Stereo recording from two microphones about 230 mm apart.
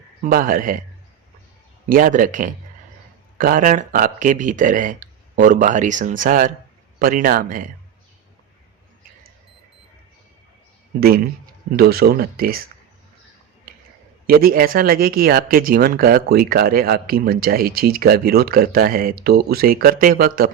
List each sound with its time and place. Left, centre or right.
0.2 s speech: right
1.9 s speech: right
11.8 s speech: right
14.3 s speech: right